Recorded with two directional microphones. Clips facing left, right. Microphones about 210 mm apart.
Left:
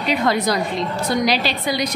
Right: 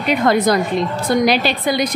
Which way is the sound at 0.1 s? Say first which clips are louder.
Right 5 dB; 50° right (ahead or behind).